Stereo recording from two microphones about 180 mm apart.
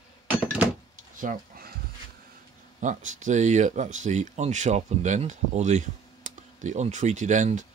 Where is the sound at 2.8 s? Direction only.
45° right (ahead or behind).